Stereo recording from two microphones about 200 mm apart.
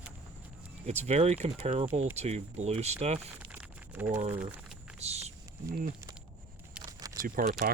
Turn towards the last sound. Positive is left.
turn(degrees=-50)  # may be behind; listen again after turning